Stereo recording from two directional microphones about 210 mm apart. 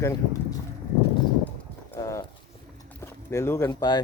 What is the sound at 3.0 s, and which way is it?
Speech, 15° left (ahead or behind).